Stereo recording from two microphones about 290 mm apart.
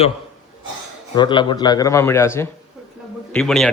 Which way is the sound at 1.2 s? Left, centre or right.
Centre.